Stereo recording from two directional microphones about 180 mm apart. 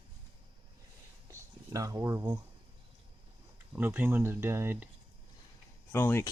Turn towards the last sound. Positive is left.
turn(degrees=15)  # may be behind; listen again after turning